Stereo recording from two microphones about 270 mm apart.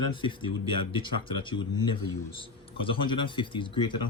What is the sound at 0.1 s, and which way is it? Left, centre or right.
Speech, centre.